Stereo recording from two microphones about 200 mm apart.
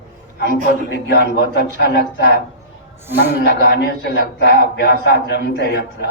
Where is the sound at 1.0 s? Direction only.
55° left (ahead or behind).